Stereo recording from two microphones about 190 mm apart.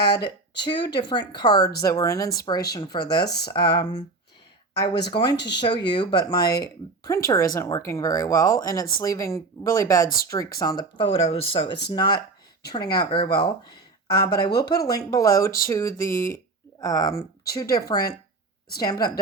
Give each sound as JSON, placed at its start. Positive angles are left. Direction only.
{"t": 0.0, "sound": "speech", "side_deg": 20}